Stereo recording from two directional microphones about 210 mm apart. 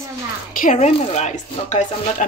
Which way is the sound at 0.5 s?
35° left (ahead or behind).